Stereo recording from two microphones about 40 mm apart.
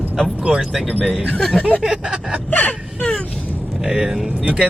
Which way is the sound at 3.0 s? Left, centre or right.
Left.